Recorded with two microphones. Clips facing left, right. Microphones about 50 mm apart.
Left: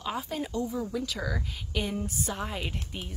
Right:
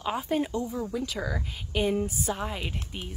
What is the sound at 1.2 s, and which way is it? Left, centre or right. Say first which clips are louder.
Speech: right 1 dB; centre.